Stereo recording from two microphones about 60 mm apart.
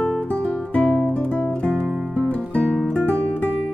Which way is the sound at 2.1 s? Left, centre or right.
Left.